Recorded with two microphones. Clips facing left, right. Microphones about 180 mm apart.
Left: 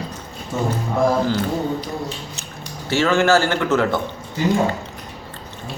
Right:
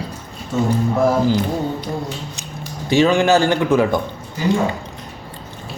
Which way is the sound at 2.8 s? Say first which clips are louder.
Right 3 dB; 15° right (ahead or behind).